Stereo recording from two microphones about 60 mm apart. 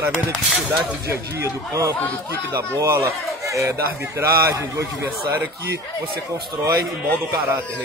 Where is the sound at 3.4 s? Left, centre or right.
Right.